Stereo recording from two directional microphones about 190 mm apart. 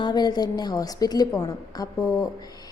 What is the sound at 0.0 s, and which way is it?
A woman's voice, 20° left (ahead or behind).